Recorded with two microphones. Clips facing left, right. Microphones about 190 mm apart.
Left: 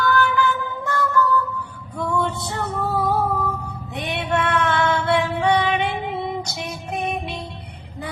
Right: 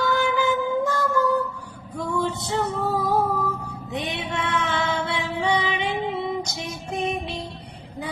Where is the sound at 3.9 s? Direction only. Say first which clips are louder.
Left 5 dB; 65° left (ahead or behind).